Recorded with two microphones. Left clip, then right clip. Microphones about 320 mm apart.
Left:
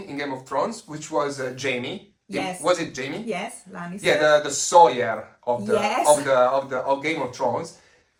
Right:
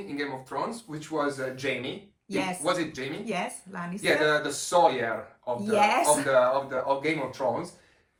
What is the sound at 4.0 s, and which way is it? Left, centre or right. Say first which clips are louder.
Speech: left 6 dB; centre.